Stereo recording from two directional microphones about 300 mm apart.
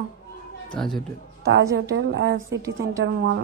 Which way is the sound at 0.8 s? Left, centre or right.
Centre.